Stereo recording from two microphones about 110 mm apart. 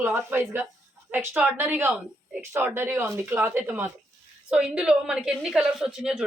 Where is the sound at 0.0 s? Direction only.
20° right (ahead or behind).